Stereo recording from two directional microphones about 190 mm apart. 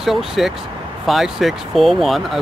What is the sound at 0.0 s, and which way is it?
Speech, centre (ahead or behind).